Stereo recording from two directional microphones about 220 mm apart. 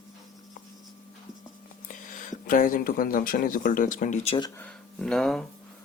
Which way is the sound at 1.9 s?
35° left (ahead or behind).